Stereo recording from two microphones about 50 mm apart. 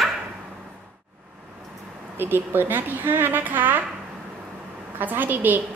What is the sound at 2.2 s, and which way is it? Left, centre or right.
A woman's voice, right.